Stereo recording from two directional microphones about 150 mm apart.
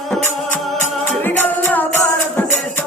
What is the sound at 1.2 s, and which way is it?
Music, 10° left (ahead or behind).